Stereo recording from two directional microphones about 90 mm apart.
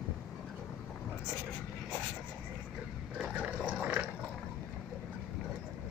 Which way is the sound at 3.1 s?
15° right (ahead or behind).